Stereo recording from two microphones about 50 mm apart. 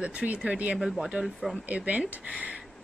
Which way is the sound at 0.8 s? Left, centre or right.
Centre.